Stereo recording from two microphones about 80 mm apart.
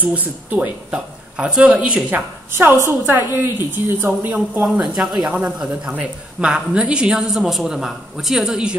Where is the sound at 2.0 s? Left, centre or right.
Right.